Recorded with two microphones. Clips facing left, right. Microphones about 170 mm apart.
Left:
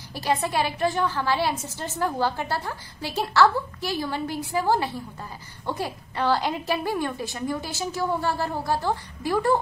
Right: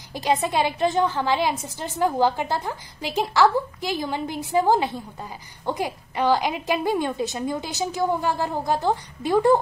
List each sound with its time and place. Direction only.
0.1 s a woman's voice: 20° right (ahead or behind)